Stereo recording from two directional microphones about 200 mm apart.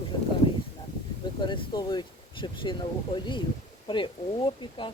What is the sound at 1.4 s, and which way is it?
Speech, 25° left (ahead or behind).